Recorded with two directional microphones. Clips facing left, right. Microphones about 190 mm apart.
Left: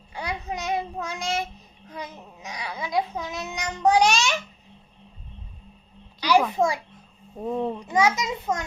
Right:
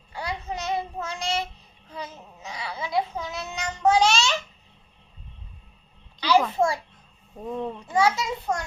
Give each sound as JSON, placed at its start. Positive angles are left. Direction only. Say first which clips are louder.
{"t": 0.1, "sound": "child singing", "louder": "left 1 dB", "side_deg": 20}
{"t": 1.9, "sound": "babbling", "louder": "even", "side_deg": 15}
{"t": 6.5, "sound": "a child's voice", "louder": "even", "side_deg": 15}